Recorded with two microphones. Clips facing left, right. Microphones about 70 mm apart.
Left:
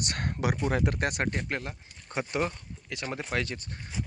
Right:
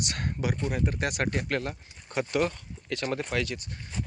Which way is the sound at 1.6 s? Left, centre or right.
Centre.